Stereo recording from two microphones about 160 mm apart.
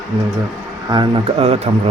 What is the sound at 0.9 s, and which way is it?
Speech, 30° right (ahead or behind).